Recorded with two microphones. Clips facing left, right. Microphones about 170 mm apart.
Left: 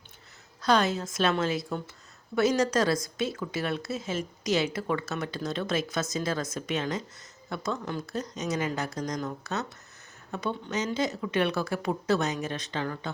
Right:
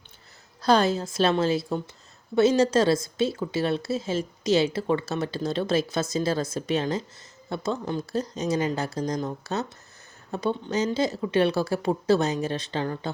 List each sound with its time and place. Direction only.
0.6 s speech: 35° right (ahead or behind)